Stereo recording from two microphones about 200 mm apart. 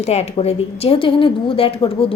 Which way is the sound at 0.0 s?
30° left (ahead or behind).